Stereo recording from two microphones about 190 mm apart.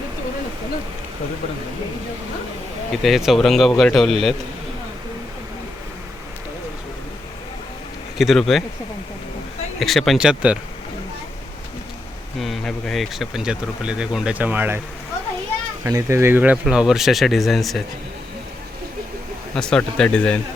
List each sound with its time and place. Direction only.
2.9 s speech: centre (ahead or behind)
8.2 s speech: centre (ahead or behind)
9.8 s speech: centre (ahead or behind)
12.4 s speech: centre (ahead or behind)
15.8 s speech: 15° right (ahead or behind); by 17.8 s centre (ahead or behind)
19.5 s speech: 5° left (ahead or behind)